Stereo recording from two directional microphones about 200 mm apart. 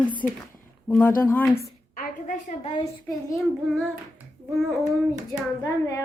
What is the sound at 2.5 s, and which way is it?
Speech, 30° left (ahead or behind).